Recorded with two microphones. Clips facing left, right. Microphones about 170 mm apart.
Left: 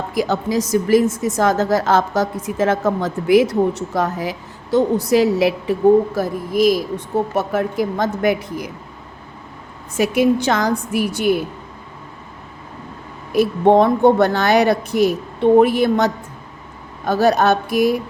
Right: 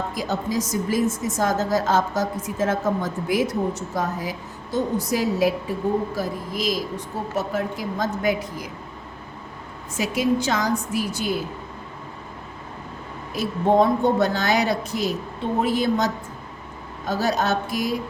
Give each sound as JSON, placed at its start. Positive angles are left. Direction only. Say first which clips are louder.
{"t": 0.1, "sound": "a woman's voice", "louder": "left 6 dB", "side_deg": 70}
{"t": 6.1, "sound": "speech", "louder": "left 9 dB", "side_deg": 55}
{"t": 10.0, "sound": "speech", "louder": "left 6 dB", "side_deg": 65}
{"t": 13.3, "sound": "speech", "louder": "left 6 dB", "side_deg": 65}